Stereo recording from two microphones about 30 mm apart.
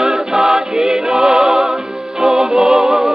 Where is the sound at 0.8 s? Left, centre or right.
Right.